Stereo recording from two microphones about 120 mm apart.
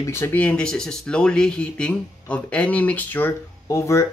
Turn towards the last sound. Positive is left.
turn(degrees=25)  # may be behind; listen again after turning